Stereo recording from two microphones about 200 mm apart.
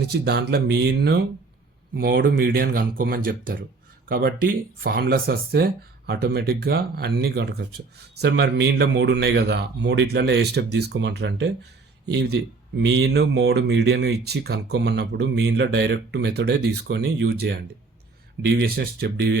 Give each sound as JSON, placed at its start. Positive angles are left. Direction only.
{"t": 0.0, "sound": "speech", "side_deg": -55}